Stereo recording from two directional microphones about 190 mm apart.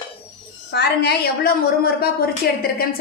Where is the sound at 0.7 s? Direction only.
60° left (ahead or behind).